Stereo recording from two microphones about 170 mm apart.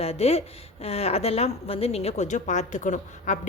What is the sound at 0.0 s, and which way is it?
Speech, 35° left (ahead or behind).